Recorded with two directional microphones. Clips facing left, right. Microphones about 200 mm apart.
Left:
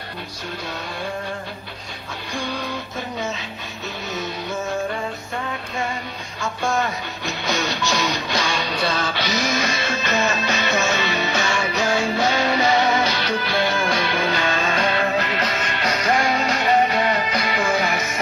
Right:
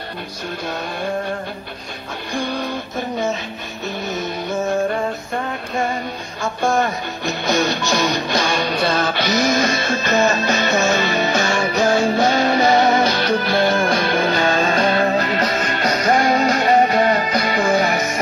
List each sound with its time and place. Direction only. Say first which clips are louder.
6.4 s music: right 4 dB; 45° right (ahead or behind)